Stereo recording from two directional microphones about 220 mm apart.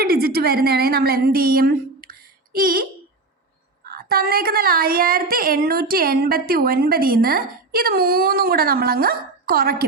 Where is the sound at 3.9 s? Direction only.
45° right (ahead or behind).